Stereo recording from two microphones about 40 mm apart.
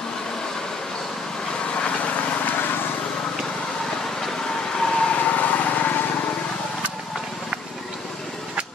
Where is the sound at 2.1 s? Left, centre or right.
Left.